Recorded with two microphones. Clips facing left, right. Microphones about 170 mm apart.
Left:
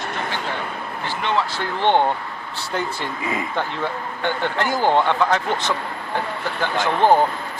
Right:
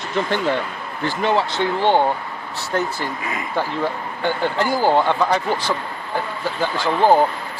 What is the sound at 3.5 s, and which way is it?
Speech, 10° right (ahead or behind).